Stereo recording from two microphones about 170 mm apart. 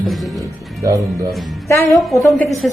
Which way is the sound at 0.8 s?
20° right (ahead or behind).